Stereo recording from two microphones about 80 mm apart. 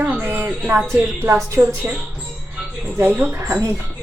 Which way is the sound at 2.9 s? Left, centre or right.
Right.